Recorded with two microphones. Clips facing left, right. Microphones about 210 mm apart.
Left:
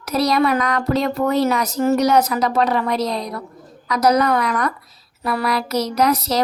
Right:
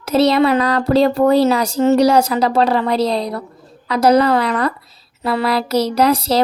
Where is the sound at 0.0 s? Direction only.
25° right (ahead or behind).